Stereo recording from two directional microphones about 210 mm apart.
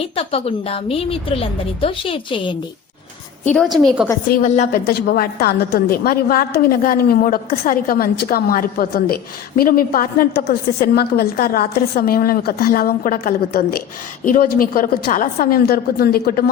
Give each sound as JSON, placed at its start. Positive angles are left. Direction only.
{"t": 0.2, "sound": "a woman's voice", "side_deg": 25}
{"t": 3.4, "sound": "a woman's voice", "side_deg": 5}
{"t": 3.8, "sound": "a woman's voice", "side_deg": -5}
{"t": 4.3, "sound": "a woman's voice", "side_deg": 40}